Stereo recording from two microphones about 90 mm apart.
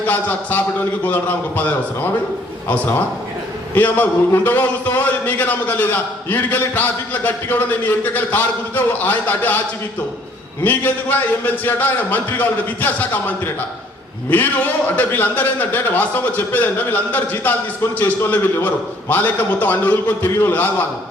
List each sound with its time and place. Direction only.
0.1 s a man's voice: 20° left (ahead or behind)
10.6 s a man's voice: 20° left (ahead or behind)